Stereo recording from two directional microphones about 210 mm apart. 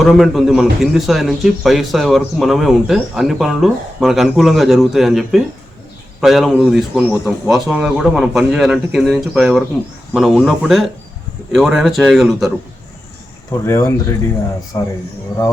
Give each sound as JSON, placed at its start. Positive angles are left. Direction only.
{"t": 0.0, "sound": "a man's voice", "side_deg": 0}
{"t": 13.5, "sound": "speech", "side_deg": 15}